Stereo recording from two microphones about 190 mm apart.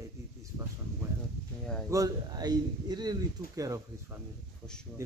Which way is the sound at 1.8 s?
20° right (ahead or behind).